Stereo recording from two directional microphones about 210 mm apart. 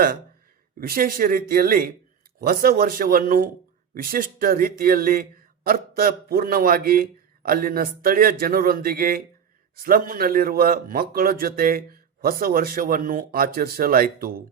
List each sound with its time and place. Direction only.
0.8 s a man's voice: 45° right (ahead or behind)